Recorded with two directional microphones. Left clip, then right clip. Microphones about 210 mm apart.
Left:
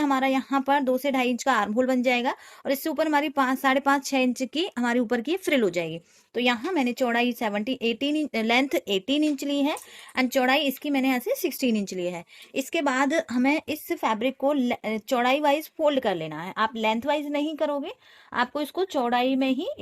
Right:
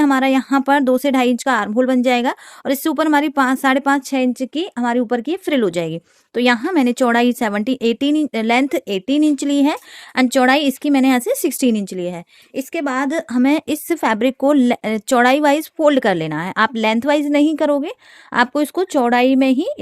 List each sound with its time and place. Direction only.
0.0 s speech: 50° right (ahead or behind)
12.5 s a woman's voice: 25° right (ahead or behind); by 19.8 s 60° right (ahead or behind)